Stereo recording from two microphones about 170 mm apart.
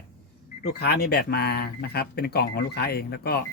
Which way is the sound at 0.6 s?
70° left (ahead or behind).